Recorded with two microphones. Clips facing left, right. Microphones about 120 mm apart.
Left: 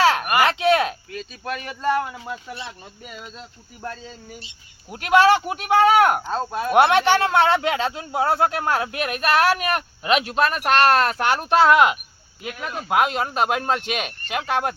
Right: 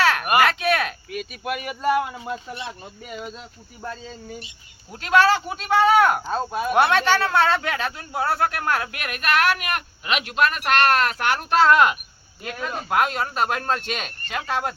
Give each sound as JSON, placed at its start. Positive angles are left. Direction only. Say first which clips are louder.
{"t": 0.0, "sound": "a sound", "louder": "left 1 dB", "side_deg": 25}
{"t": 1.1, "sound": "speech", "louder": "right 2 dB", "side_deg": -15}
{"t": 4.9, "sound": "speech", "louder": "left 2 dB", "side_deg": 15}
{"t": 6.3, "sound": "speech", "louder": "even", "side_deg": -5}
{"t": 6.7, "sound": "speech", "louder": "left 3 dB", "side_deg": 25}